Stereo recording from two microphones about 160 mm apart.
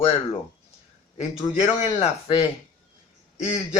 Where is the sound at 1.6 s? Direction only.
40° left (ahead or behind).